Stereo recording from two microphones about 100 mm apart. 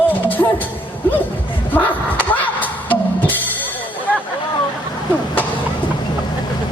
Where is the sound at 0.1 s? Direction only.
20° left (ahead or behind).